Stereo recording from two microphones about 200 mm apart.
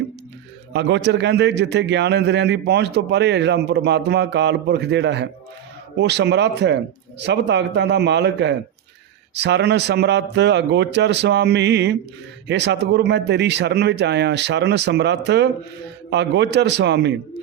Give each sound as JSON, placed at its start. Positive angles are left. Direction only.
{"t": 0.7, "sound": "a man's voice", "side_deg": -60}